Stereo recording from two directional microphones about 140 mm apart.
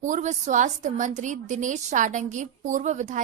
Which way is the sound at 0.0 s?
60° right (ahead or behind).